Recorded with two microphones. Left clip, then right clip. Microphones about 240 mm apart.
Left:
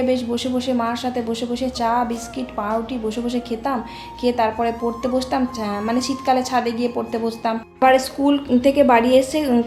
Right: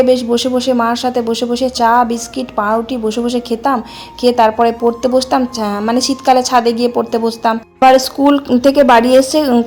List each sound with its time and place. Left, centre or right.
0.0 s a woman's voice: right